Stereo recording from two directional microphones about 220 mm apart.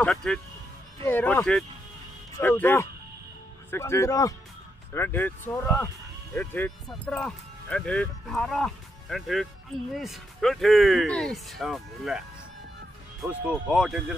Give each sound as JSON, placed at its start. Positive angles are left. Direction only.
{"t": 0.0, "sound": "speech", "side_deg": 5}
{"t": 13.2, "sound": "speech", "side_deg": -5}